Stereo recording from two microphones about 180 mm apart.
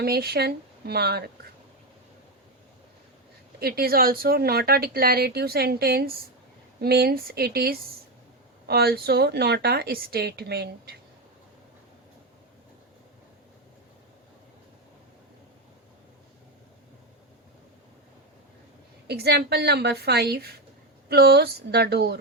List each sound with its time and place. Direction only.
0.0 s speech: 60° right (ahead or behind)
3.6 s speech: 55° right (ahead or behind)
19.0 s speech: 65° right (ahead or behind)